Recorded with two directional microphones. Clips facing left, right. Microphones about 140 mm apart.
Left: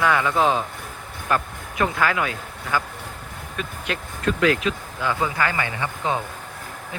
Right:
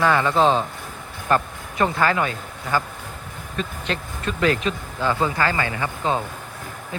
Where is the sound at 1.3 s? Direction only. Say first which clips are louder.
Right 3 dB; 5° left (ahead or behind).